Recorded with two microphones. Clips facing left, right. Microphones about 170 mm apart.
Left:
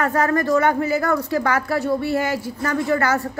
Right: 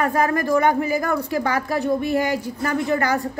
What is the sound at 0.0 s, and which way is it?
Speech, 15° right (ahead or behind).